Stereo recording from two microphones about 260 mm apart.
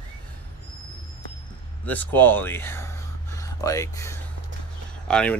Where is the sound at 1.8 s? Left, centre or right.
Centre.